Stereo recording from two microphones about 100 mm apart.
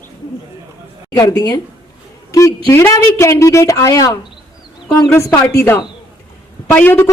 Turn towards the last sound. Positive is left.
turn(degrees=15)  # may be behind; listen again after turning